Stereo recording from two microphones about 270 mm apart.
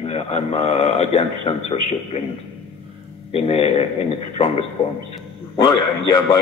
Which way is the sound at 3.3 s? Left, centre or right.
Left.